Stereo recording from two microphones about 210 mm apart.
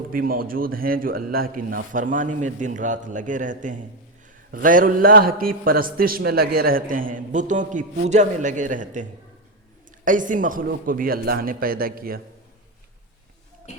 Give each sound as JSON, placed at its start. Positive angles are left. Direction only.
{"t": 0.1, "sound": "a man's voice", "side_deg": -45}